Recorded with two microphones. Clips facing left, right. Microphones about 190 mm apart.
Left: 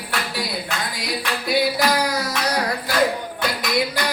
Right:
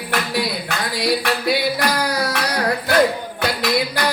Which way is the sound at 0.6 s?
70° right (ahead or behind).